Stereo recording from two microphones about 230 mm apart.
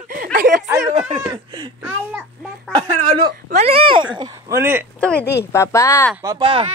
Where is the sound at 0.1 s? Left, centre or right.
Right.